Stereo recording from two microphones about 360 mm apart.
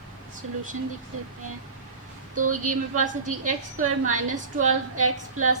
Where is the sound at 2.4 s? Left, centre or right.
Right.